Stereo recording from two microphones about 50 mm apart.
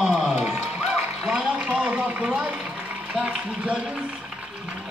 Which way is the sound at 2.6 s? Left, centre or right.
Right.